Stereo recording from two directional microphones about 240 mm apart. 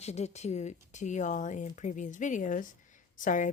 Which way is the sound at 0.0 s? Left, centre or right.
Left.